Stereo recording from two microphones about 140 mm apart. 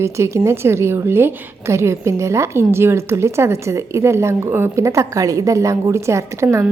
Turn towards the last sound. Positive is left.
turn(degrees=-20)  # may be behind; listen again after turning